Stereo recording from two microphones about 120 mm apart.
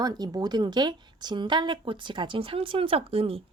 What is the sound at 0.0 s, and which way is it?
A woman's voice, 35° right (ahead or behind).